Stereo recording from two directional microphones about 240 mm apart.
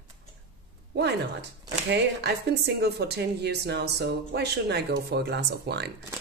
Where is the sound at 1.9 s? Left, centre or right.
Right.